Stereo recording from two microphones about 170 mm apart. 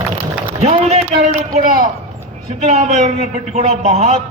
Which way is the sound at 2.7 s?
40° right (ahead or behind).